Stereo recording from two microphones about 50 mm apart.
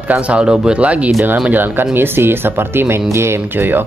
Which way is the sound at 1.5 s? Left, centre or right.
Right.